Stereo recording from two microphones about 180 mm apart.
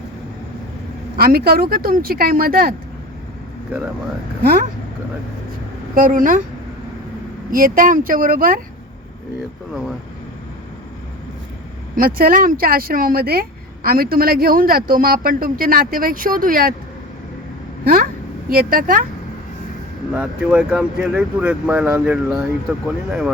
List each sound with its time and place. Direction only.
1.1 s speech: 55° right (ahead or behind)
5.9 s speech: 50° right (ahead or behind)
7.5 s speech: 50° right (ahead or behind)
11.9 s speech: 55° right (ahead or behind)
17.8 s speech: 50° right (ahead or behind)
20.1 s speech: 5° right (ahead or behind)